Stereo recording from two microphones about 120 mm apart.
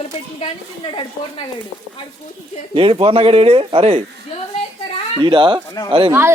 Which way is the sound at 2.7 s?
45° right (ahead or behind).